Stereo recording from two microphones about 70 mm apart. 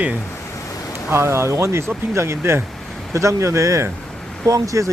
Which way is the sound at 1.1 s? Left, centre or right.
Right.